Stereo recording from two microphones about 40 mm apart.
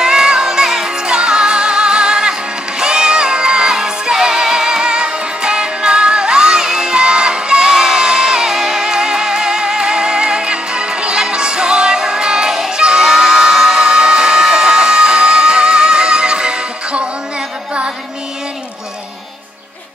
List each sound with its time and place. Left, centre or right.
0.0 s music: centre